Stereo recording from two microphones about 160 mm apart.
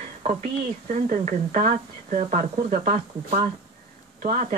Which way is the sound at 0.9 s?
45° right (ahead or behind).